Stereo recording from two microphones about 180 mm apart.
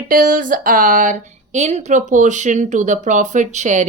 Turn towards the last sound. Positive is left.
turn(degrees=-40)  # may be behind; listen again after turning